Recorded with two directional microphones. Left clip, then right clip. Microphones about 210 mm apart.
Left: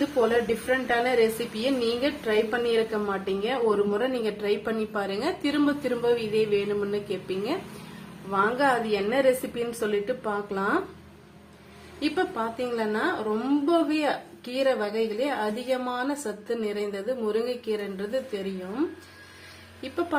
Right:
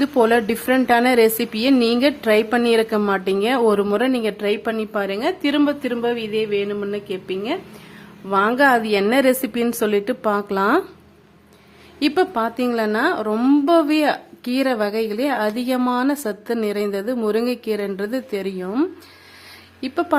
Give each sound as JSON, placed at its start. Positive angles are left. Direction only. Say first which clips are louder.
{"t": 0.0, "sound": "a woman's voice", "louder": "right 7 dB", "side_deg": -55}
{"t": 8.3, "sound": "a woman's voice", "louder": "right 8 dB", "side_deg": -50}
{"t": 11.9, "sound": "a woman's voice", "louder": "right 8 dB", "side_deg": -60}